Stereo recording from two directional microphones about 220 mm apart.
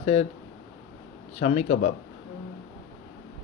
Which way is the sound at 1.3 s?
30° left (ahead or behind).